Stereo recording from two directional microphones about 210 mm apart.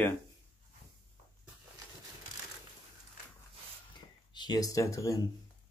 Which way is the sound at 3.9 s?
20° left (ahead or behind).